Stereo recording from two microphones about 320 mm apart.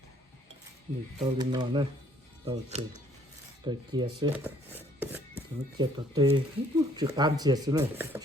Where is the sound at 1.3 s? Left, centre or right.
Centre.